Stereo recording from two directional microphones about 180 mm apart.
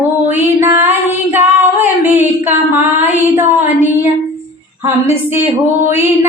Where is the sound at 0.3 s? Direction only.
10° right (ahead or behind).